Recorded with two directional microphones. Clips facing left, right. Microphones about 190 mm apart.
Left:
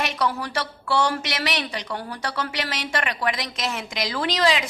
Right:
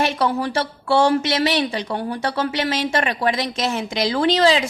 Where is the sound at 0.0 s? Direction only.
25° right (ahead or behind).